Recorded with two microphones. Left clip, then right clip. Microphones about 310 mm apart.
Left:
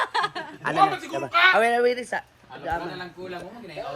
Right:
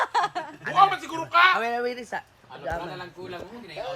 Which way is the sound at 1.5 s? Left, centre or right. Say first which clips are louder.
Left 6 dB; centre.